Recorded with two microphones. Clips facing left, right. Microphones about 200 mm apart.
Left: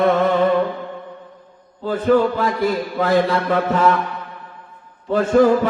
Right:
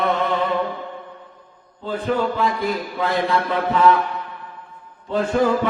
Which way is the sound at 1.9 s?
50° left (ahead or behind).